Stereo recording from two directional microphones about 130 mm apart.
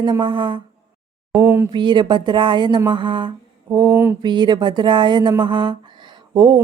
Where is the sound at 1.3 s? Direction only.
15° right (ahead or behind).